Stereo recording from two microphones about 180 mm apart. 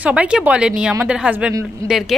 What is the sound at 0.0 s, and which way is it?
A woman's voice, 5° right (ahead or behind).